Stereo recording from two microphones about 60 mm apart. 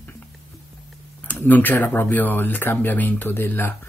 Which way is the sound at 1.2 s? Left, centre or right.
Left.